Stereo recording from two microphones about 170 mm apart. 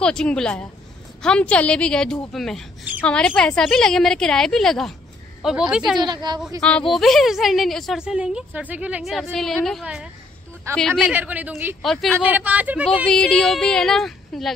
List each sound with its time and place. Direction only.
0.0 s a woman's voice: 5° left (ahead or behind)
5.9 s a woman's voice: 25° right (ahead or behind)
6.9 s a woman's voice: centre (ahead or behind)
10.7 s speech: 15° right (ahead or behind)
11.8 s a woman's voice: centre (ahead or behind)
12.1 s speech: 10° right (ahead or behind)
13.0 s a woman's voice: 5° left (ahead or behind)